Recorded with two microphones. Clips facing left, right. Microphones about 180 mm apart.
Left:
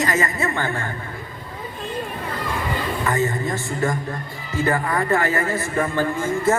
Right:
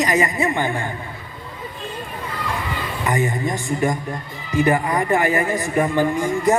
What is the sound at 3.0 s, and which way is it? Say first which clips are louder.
A man's voice: right 2 dB; 15° right (ahead or behind).